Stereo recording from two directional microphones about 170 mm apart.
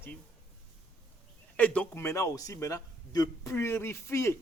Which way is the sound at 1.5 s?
10° left (ahead or behind).